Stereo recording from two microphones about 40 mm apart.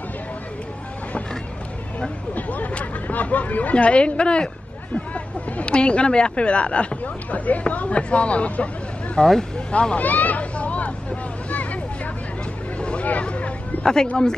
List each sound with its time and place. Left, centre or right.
2.3 s speech: left
3.7 s speech: left
7.2 s speech: left
9.2 s speech: centre
9.7 s speech: left
10.0 s vehicle: left
12.8 s hubbub: left
13.2 s a sound: left